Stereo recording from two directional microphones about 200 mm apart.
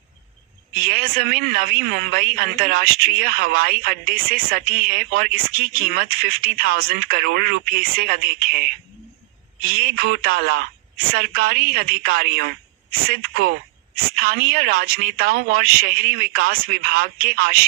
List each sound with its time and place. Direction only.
0.8 s speech: 50° right (ahead or behind)
9.7 s speech: 50° right (ahead or behind)
13.9 s speech: 50° right (ahead or behind)